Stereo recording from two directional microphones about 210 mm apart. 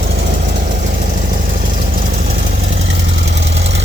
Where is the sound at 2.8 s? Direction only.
60° right (ahead or behind).